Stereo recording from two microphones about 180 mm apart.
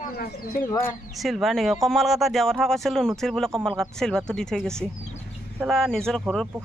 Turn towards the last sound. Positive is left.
turn(degrees=5)  # may be behind; listen again after turning